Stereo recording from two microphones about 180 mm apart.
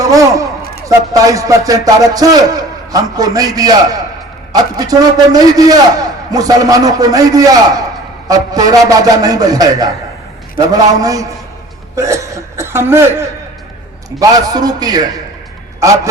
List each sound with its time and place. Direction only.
0.0 s a sound: 20° right (ahead or behind)
0.9 s a man's voice: 20° right (ahead or behind)
11.9 s hiccup: 15° right (ahead or behind)
14.2 s a man's voice: 20° right (ahead or behind)